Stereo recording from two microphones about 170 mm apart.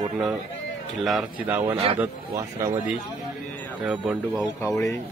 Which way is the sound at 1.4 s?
10° right (ahead or behind).